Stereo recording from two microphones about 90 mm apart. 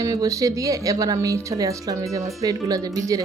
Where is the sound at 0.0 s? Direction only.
35° right (ahead or behind).